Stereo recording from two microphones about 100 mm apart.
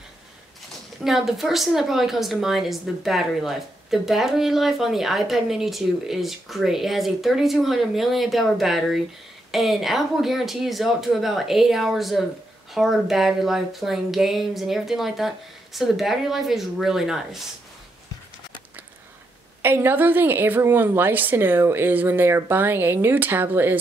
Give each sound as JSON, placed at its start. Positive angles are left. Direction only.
{"t": 1.0, "sound": "a woman's voice", "side_deg": 0}
{"t": 19.6, "sound": "a woman's voice", "side_deg": -20}